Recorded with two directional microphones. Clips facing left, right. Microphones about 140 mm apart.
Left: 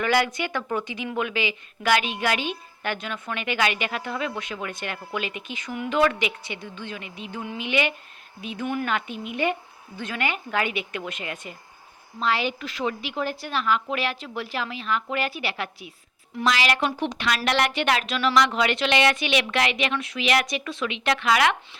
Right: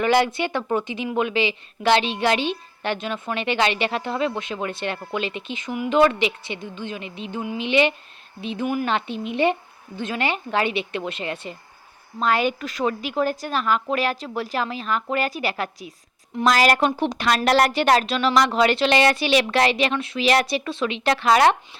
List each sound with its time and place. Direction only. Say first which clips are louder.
0.0 s a woman's voice: right 4 dB; 25° right (ahead or behind)
12.2 s a woman's voice: right 4 dB; 50° right (ahead or behind)